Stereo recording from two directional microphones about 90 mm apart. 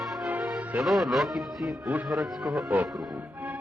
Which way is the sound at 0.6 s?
15° right (ahead or behind).